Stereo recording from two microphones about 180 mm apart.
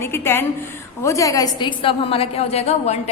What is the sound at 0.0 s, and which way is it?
A woman's voice, 15° left (ahead or behind).